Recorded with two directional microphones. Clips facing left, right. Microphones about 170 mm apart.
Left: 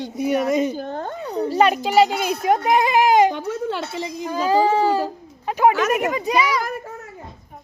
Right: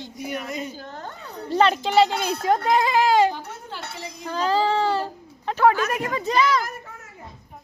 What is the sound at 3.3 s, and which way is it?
Music, 85° left.